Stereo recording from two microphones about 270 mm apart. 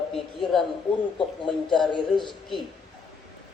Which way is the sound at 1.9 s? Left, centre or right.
Centre.